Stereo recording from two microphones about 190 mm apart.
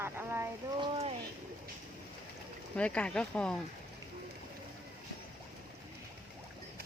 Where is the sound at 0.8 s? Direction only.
30° right (ahead or behind).